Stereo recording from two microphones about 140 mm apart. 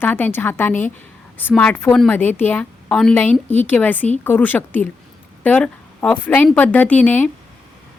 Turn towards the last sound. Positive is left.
turn(degrees=10)  # may be behind; listen again after turning